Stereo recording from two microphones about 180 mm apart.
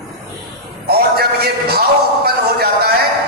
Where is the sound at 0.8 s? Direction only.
60° right (ahead or behind).